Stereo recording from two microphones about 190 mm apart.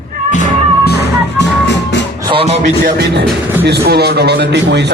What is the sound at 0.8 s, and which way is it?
Music, 65° left (ahead or behind).